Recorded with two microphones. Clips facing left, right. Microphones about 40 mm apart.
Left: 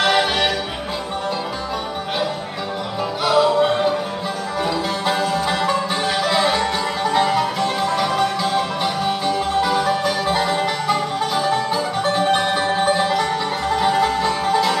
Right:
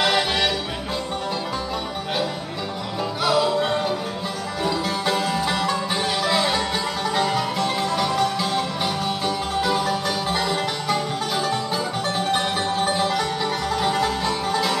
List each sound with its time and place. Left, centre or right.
0.0 s music: centre
3.3 s music: centre
4.6 s music: centre
5.6 s music: centre